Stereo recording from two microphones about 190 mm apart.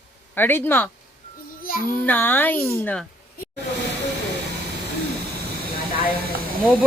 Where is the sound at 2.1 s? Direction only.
10° left (ahead or behind).